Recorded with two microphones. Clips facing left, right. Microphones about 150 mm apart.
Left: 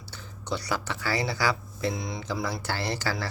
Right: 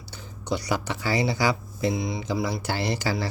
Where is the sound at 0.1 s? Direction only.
15° right (ahead or behind).